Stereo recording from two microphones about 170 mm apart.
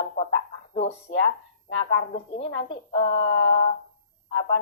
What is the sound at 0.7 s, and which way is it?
A woman's voice, 35° left (ahead or behind).